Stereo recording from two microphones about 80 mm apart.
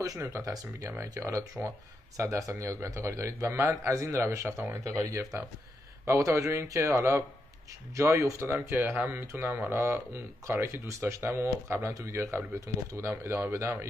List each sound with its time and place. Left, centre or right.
0.2 s speech: right
5.0 s speech: right